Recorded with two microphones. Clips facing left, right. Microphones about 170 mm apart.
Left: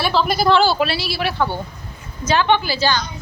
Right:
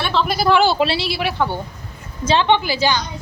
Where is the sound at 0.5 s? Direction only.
20° right (ahead or behind).